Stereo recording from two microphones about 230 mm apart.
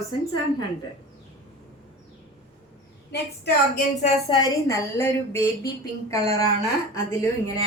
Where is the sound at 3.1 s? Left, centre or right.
Left.